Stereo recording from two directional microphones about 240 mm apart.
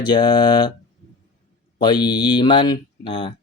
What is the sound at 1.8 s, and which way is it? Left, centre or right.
Speech, centre.